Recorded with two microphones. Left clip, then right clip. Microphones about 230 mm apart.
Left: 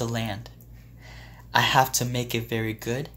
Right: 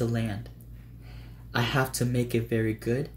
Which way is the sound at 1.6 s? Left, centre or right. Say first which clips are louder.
Left 7 dB; centre.